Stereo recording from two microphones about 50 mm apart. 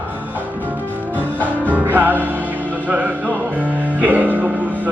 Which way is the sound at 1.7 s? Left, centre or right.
Right.